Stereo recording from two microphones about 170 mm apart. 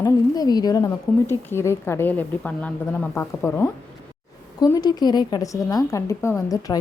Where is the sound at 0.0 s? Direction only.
20° left (ahead or behind).